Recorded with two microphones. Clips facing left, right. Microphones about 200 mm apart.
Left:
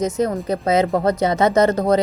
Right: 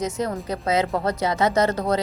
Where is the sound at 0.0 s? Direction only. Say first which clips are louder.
Left 6 dB; 20° left (ahead or behind).